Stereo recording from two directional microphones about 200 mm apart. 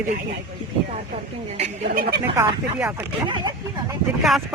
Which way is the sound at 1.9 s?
55° right (ahead or behind).